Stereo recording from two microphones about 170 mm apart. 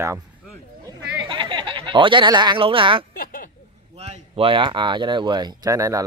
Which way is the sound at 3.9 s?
40° right (ahead or behind).